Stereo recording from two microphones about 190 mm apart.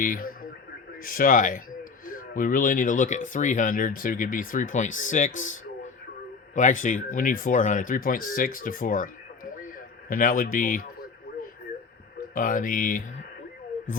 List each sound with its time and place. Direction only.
0.0 s speech: 50° left (ahead or behind)
5.4 s a sound: 40° left (ahead or behind)
6.5 s speech: 40° left (ahead or behind)
12.3 s speech: 45° left (ahead or behind)